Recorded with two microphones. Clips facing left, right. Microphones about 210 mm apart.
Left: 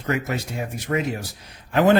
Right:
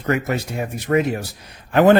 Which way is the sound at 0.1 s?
55° right (ahead or behind).